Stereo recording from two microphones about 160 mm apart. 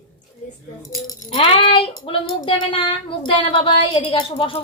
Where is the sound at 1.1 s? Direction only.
30° left (ahead or behind).